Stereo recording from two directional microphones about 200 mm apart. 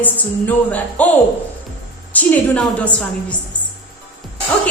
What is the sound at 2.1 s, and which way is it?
A man's voice, 5° left (ahead or behind).